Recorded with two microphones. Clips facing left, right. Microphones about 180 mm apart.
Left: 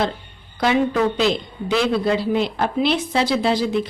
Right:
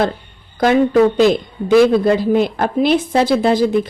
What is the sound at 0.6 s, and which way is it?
A woman's voice, 45° right (ahead or behind).